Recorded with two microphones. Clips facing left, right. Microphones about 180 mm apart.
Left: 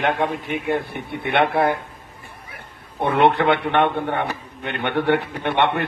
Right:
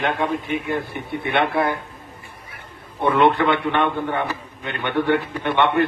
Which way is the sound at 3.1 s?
60° left (ahead or behind).